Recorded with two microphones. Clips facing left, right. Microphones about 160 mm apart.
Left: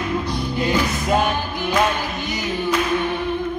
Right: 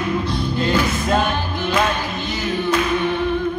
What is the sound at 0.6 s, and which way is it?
Music, 15° left (ahead or behind).